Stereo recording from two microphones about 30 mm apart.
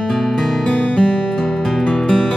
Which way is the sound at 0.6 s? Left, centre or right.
Left.